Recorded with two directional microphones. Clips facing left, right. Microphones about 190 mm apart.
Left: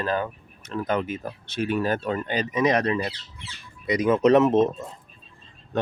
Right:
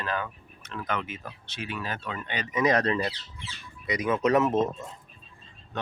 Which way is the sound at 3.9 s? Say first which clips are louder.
Left 6 dB; 30° left (ahead or behind).